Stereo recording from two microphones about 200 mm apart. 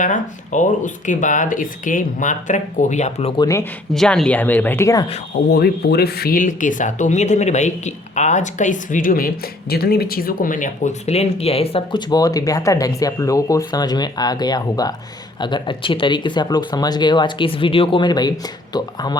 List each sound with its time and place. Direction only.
0.0 s speech: 40° left (ahead or behind)
3.4 s speech: 15° left (ahead or behind)
3.9 s speech: centre (ahead or behind)
5.5 s speech: 55° left (ahead or behind); by 19.1 s 20° left (ahead or behind)